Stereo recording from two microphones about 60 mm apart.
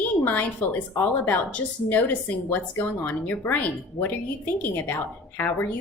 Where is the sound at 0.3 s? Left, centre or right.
Left.